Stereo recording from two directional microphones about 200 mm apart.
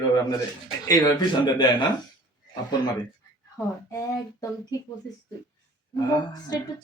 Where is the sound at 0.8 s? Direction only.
15° left (ahead or behind).